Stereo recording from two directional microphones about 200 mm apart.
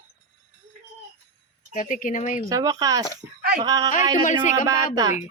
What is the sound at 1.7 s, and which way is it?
Speech, 40° left (ahead or behind).